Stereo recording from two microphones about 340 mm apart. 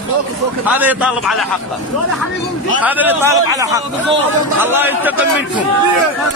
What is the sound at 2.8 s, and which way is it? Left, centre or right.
A man's voice, centre.